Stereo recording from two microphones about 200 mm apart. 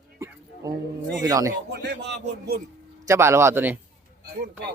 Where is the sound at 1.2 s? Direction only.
15° right (ahead or behind).